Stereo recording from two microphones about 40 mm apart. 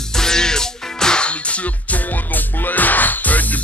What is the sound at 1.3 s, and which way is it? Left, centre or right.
Music, left.